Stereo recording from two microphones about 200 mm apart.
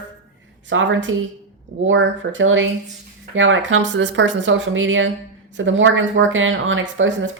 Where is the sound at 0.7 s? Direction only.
70° right (ahead or behind).